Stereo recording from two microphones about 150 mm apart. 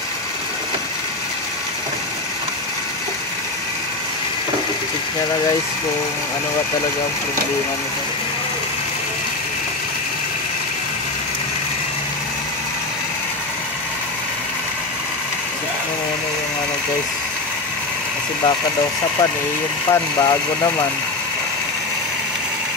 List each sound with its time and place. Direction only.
19.9 s speech: 25° left (ahead or behind)